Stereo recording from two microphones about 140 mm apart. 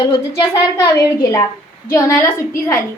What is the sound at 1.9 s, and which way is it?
Speech, 20° left (ahead or behind).